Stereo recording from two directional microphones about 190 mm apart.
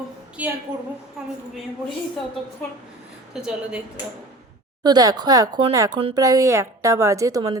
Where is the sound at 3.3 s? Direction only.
5° right (ahead or behind).